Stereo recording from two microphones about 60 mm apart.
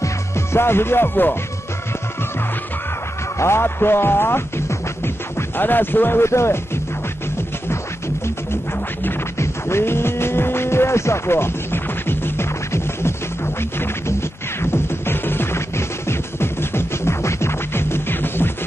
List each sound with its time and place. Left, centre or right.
0.0 s speech: left
3.3 s speech: left
9.4 s music: left